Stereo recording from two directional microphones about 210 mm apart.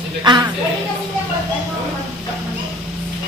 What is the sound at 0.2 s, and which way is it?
Speech, 20° right (ahead or behind).